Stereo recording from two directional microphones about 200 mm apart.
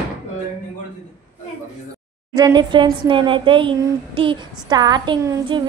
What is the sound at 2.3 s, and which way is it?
Child singing, 20° right (ahead or behind).